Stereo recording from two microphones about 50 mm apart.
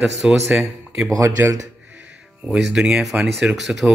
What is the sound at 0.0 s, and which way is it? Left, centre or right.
Speech, centre.